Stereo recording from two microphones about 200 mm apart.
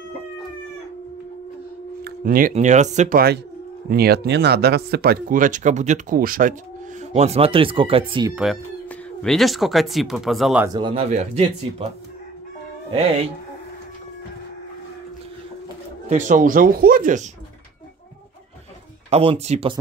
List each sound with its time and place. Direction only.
2.0 s speech: 45° right (ahead or behind)
7.0 s speech: 35° right (ahead or behind)
9.2 s speech: centre (ahead or behind)
10.7 s speech: 25° right (ahead or behind)
11.1 s speech: 35° right (ahead or behind)
16.1 s speech: 40° right (ahead or behind)
19.0 s speech: 30° right (ahead or behind)